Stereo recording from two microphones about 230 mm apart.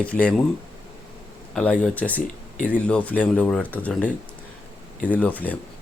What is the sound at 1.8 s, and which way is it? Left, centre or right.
Speech, centre.